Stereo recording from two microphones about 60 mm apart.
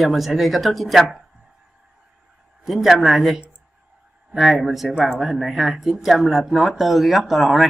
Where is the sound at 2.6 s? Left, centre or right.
Centre.